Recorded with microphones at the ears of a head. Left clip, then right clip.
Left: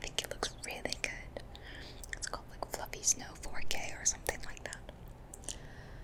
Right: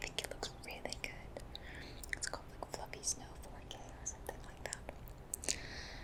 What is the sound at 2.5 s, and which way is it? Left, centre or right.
Whispering, left.